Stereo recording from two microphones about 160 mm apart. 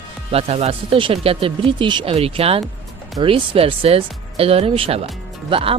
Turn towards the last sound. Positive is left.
turn(degrees=-35)  # may be behind; listen again after turning